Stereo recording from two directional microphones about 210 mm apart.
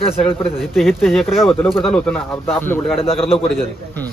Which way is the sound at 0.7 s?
Centre (ahead or behind).